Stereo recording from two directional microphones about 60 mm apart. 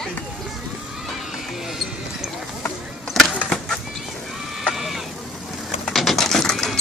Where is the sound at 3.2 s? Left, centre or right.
Centre.